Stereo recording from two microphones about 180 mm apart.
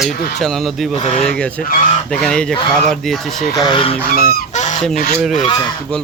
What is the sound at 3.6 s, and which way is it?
Speech, 25° left (ahead or behind).